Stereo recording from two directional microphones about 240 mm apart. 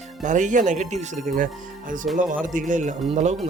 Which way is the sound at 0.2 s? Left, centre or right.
Right.